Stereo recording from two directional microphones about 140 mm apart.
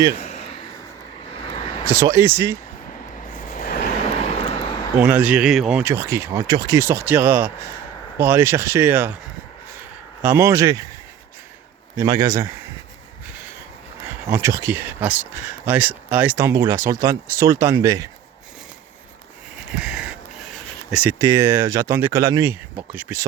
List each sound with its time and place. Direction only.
0.2 s a sound: 55° left (ahead or behind)
1.8 s speech: 20° right (ahead or behind)
3.5 s vehicle: 90° left
4.0 s vehicle: 50° left (ahead or behind)
4.9 s speech: 10° right (ahead or behind)
5.8 s speech: 20° right (ahead or behind)
10.2 s speech: 20° right (ahead or behind)
11.9 s speech: 20° right (ahead or behind)
14.3 s speech: 20° right (ahead or behind)
19.7 s a sound: 5° right (ahead or behind)
20.9 s speech: 10° right (ahead or behind)
21.2 s speech: 20° right (ahead or behind)